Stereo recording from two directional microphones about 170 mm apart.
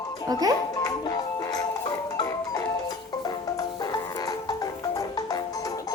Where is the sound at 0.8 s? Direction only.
20° left (ahead or behind).